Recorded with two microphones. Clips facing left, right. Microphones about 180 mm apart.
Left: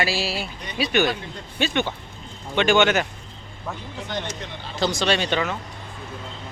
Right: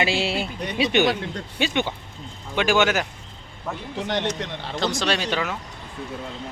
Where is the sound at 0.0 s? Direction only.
20° right (ahead or behind); by 3.1 s 5° right (ahead or behind).